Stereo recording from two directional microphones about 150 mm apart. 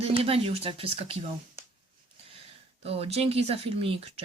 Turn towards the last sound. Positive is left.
turn(degrees=-40)  # may be behind; listen again after turning